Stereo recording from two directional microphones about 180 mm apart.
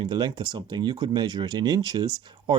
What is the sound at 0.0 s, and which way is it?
Speech, 25° right (ahead or behind).